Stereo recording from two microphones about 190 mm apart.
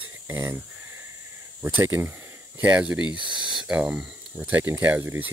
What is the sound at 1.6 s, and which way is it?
Speech, 10° right (ahead or behind).